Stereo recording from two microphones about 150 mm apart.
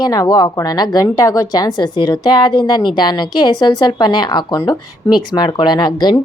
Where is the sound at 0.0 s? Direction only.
25° left (ahead or behind).